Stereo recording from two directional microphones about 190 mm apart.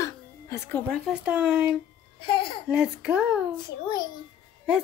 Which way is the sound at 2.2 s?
30° left (ahead or behind).